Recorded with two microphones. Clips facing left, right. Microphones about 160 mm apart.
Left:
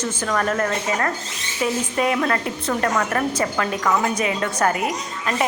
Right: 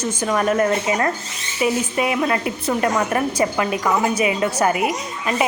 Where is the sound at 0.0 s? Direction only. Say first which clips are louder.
Right 3 dB; 15° right (ahead or behind).